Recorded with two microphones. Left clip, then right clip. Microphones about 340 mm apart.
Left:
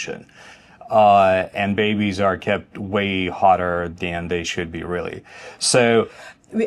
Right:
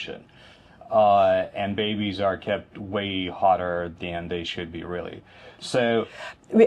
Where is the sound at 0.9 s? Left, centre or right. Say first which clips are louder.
Left 5 dB; left.